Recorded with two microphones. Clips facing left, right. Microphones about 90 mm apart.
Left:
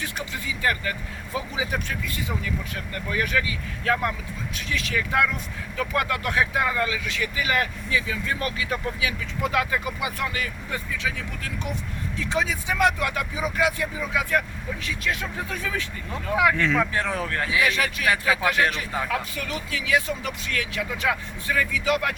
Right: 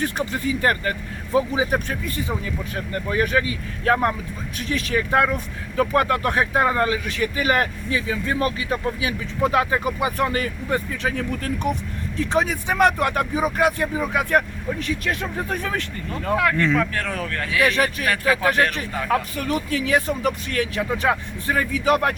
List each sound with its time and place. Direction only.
0.0 s speech: 45° right (ahead or behind)
16.3 s speech: 10° left (ahead or behind)
16.9 s speech: 20° left (ahead or behind)
17.6 s speech: 40° right (ahead or behind)
18.0 s speech: 20° left (ahead or behind)
19.0 s speech: 40° right (ahead or behind)